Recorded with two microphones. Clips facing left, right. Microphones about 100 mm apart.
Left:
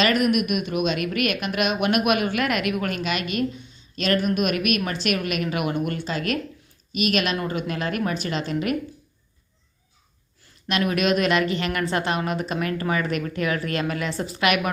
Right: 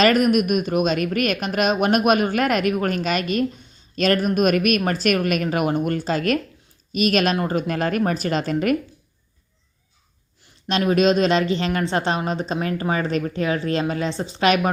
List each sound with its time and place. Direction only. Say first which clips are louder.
0.0 s a woman's voice: right 4 dB; 40° right (ahead or behind)
10.7 s speech: right 4 dB; 30° right (ahead or behind)